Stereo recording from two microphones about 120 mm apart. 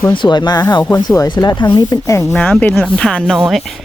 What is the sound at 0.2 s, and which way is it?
Speech, 35° left (ahead or behind).